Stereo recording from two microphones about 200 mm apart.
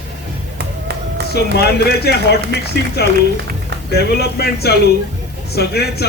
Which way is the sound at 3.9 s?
55° left (ahead or behind).